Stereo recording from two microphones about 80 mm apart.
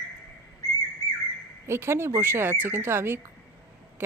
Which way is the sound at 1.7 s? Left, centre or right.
Right.